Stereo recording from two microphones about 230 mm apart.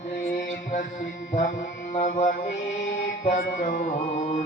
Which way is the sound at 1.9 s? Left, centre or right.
Left.